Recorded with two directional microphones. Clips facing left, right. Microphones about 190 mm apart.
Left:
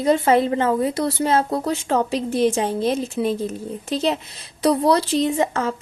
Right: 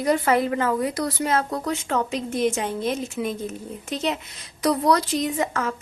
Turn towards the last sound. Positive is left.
turn(degrees=30)  # may be behind; listen again after turning